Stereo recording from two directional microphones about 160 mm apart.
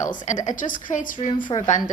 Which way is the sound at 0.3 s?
50° left (ahead or behind).